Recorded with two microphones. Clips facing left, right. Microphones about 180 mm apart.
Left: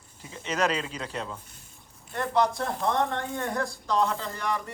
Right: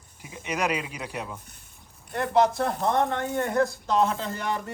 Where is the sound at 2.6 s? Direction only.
25° right (ahead or behind).